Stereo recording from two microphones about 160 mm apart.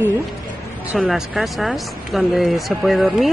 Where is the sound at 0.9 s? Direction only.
Centre (ahead or behind).